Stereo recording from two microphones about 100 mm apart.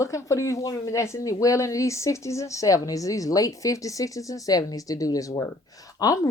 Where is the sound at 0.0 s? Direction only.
30° left (ahead or behind).